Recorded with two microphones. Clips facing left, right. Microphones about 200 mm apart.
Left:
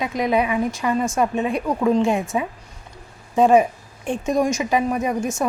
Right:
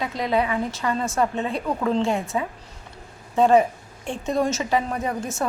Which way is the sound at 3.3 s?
15° left (ahead or behind).